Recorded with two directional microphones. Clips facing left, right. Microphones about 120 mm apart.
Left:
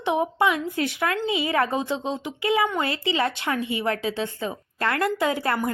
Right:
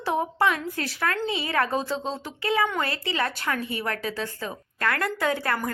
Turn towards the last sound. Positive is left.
turn(degrees=20)  # may be behind; listen again after turning